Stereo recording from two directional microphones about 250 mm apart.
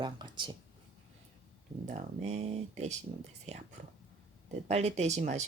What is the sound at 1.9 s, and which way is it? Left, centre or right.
Speech, right.